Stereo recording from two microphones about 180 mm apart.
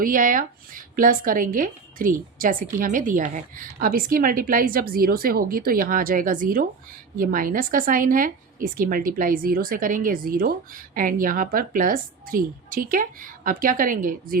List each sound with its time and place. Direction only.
0.0 s speech: 50° right (ahead or behind)